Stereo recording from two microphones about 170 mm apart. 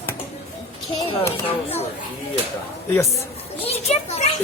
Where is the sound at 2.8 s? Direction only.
15° left (ahead or behind).